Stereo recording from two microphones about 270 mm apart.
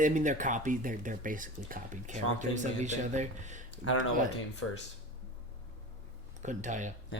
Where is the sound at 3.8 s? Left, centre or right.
Left.